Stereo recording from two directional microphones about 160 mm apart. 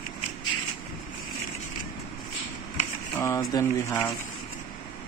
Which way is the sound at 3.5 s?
20° left (ahead or behind).